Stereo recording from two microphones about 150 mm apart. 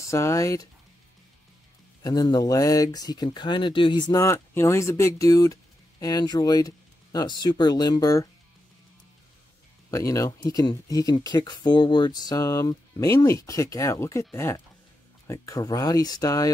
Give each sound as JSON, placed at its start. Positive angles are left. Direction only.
{"t": 0.0, "sound": "speech", "side_deg": 20}
{"t": 2.0, "sound": "speech", "side_deg": 25}
{"t": 9.8, "sound": "speech", "side_deg": 20}